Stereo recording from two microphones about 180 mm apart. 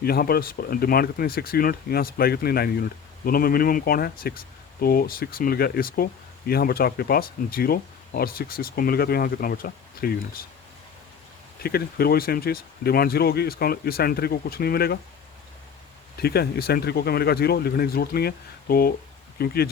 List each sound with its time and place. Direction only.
0.0 s speech: 55° left (ahead or behind)
11.6 s speech: 60° left (ahead or behind)
16.1 s speech: 60° left (ahead or behind)